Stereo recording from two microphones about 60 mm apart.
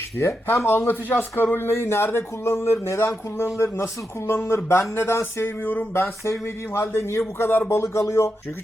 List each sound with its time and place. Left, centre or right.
0.2 s a man's voice: left
5.4 s a man's voice: left
5.9 s speech: left